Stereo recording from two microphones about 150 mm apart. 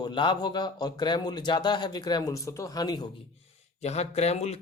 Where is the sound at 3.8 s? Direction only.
45° left (ahead or behind).